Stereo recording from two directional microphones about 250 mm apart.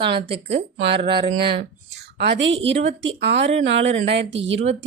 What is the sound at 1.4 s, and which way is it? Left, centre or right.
A woman's voice, right.